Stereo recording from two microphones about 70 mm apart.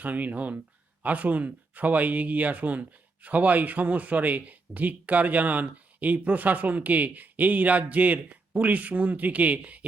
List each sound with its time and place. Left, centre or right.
0.0 s speech: right